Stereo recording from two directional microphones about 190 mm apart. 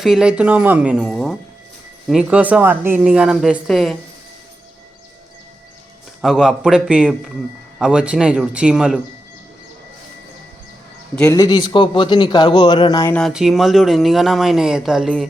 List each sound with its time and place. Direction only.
0.0 s speech: 5° right (ahead or behind)
6.2 s speech: centre (ahead or behind)
11.1 s a man's voice: 5° left (ahead or behind)
11.3 s speech: 20° left (ahead or behind)
13.1 s speech: 5° left (ahead or behind)